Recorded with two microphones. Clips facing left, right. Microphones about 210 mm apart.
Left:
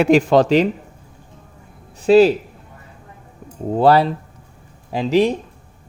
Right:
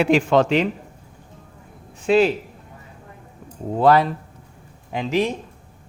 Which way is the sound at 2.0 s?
40° left (ahead or behind).